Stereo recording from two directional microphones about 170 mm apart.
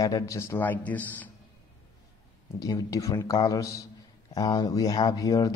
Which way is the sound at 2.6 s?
20° left (ahead or behind).